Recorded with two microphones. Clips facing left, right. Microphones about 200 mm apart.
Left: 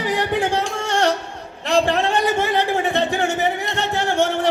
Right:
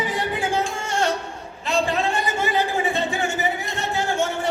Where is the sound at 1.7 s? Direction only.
75° left (ahead or behind).